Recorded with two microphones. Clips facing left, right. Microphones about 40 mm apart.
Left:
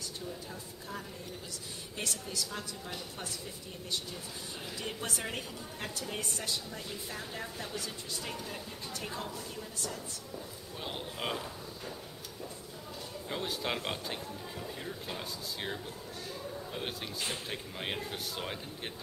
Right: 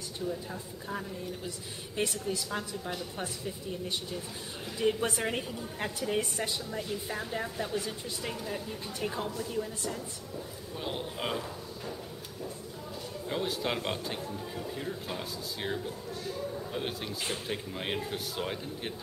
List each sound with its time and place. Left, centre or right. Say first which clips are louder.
2.0 s a woman's voice: right 6 dB; centre
4.7 s a woman's voice: right 11 dB; centre
10.8 s speech: right 3 dB; centre
13.3 s speech: right 3 dB; centre